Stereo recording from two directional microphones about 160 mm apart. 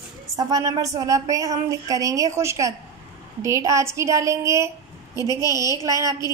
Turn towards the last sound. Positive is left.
turn(degrees=-20)  # may be behind; listen again after turning